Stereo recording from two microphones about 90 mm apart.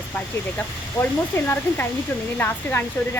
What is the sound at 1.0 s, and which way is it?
Speech, 20° left (ahead or behind).